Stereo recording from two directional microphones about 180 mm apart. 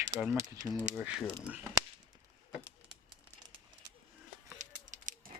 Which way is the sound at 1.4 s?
10° right (ahead or behind).